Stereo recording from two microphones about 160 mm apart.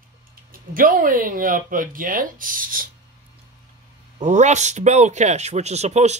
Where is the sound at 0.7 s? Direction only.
60° right (ahead or behind).